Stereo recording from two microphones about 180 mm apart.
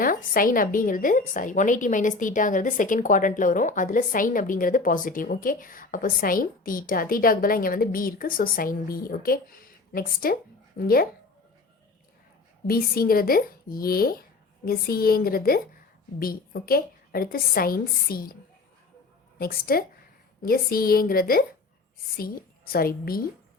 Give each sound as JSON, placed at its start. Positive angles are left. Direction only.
{"t": 0.0, "sound": "a woman's voice", "side_deg": 50}
{"t": 12.6, "sound": "speech", "side_deg": 55}
{"t": 19.4, "sound": "speech", "side_deg": 55}